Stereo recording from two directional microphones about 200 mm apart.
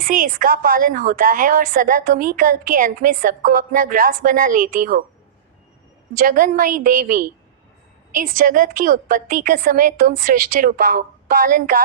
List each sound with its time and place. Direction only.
0.0 s a woman's voice: 45° right (ahead or behind)
6.1 s a woman's voice: 45° right (ahead or behind)